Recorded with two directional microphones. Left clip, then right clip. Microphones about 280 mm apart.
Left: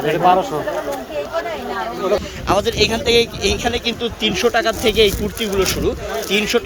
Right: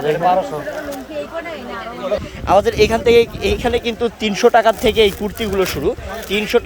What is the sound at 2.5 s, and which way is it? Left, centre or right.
Speech, centre.